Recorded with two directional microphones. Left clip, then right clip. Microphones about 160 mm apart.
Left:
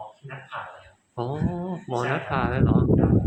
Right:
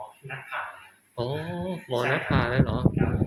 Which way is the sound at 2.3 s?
35° left (ahead or behind).